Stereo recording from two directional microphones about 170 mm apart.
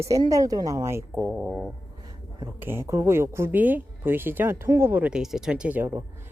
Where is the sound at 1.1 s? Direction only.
5° right (ahead or behind).